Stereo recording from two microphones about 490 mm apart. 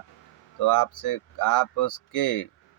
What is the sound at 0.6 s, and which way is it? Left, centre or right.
Speech, left.